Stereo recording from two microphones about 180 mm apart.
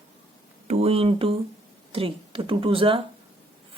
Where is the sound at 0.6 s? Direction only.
35° right (ahead or behind).